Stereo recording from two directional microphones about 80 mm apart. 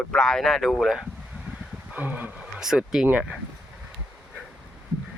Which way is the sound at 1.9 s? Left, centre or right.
Right.